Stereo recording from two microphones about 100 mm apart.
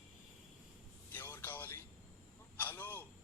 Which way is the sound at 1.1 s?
25° left (ahead or behind).